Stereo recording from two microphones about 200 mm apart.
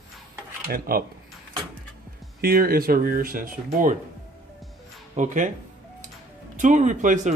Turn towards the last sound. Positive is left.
turn(degrees=-40)  # may be behind; listen again after turning